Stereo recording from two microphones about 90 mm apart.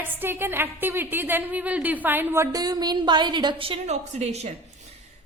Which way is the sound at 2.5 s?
45° right (ahead or behind).